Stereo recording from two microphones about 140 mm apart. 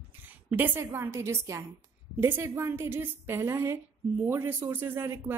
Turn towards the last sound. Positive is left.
turn(degrees=-15)  # may be behind; listen again after turning